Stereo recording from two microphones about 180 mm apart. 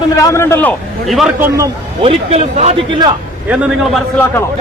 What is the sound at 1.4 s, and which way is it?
Speech, 15° right (ahead or behind).